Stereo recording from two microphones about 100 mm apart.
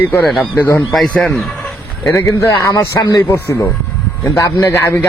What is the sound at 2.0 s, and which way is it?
A man's voice, 30° left (ahead or behind).